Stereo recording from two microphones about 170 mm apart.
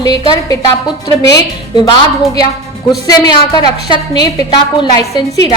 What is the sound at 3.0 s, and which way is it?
A woman's voice, 25° left (ahead or behind).